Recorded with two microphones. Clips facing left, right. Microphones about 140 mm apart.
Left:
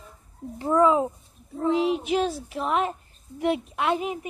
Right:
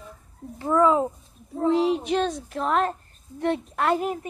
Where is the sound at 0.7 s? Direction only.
10° left (ahead or behind).